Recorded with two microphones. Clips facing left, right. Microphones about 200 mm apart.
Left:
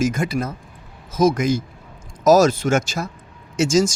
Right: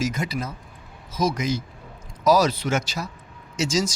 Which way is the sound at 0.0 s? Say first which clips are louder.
Left 6 dB; 50° left (ahead or behind).